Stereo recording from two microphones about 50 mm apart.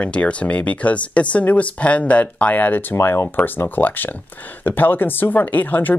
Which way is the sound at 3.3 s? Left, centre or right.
Left.